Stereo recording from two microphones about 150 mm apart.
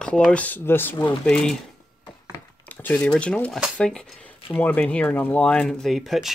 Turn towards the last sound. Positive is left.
turn(degrees=0)  # may be behind; listen again after turning